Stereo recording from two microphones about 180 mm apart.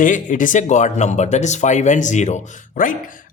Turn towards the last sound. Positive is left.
turn(degrees=50)  # may be behind; listen again after turning